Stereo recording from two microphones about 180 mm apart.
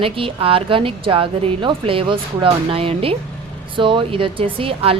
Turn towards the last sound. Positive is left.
turn(degrees=-30)  # may be behind; listen again after turning